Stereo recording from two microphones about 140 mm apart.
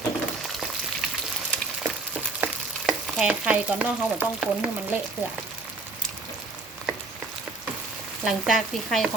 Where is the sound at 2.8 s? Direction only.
5° right (ahead or behind).